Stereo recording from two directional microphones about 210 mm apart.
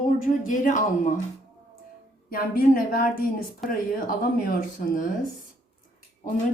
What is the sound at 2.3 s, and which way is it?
A woman's voice, 45° left (ahead or behind).